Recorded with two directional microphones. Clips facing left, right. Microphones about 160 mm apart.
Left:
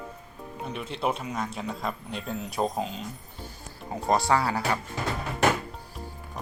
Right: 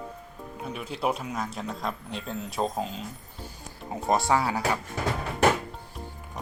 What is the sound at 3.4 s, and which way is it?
Music, 5° right (ahead or behind).